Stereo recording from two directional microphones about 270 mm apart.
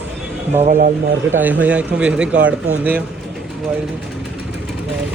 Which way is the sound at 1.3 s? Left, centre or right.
Centre.